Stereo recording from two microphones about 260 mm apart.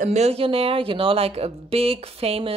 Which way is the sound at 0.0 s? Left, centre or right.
Right.